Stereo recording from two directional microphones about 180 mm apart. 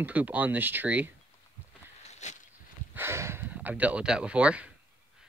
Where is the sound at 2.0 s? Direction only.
40° left (ahead or behind).